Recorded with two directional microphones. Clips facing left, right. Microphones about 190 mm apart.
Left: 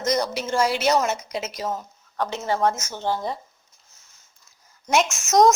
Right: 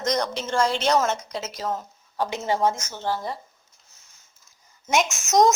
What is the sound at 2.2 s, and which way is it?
Speech, 15° right (ahead or behind).